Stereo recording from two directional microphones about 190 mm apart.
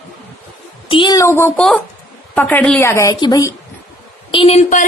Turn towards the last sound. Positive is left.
turn(degrees=35)  # may be behind; listen again after turning